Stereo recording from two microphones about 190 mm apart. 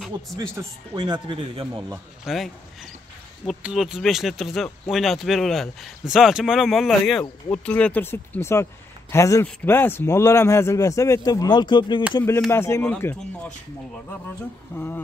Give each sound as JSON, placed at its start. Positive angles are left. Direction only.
{"t": 0.4, "sound": "a man's voice", "side_deg": -20}
{"t": 2.2, "sound": "speech", "side_deg": 0}